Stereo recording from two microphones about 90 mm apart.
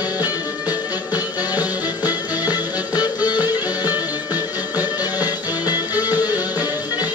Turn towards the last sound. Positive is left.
turn(degrees=50)  # may be behind; listen again after turning